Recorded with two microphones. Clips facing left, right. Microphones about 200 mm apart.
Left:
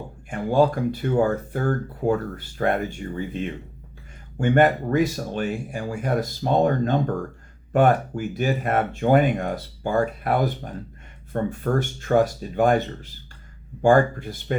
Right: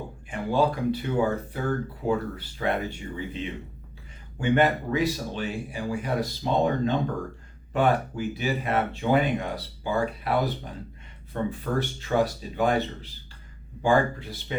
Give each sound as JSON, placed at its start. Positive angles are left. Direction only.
{"t": 0.3, "sound": "speech", "side_deg": 50}